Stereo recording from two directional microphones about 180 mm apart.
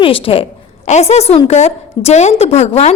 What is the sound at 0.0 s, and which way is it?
A woman's voice, 30° left (ahead or behind).